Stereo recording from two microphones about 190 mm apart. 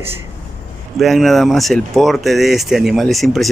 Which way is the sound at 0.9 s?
Centre (ahead or behind).